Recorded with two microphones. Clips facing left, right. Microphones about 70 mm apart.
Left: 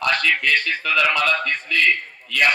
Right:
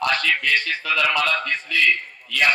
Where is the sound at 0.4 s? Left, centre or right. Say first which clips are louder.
Left 2 dB; left.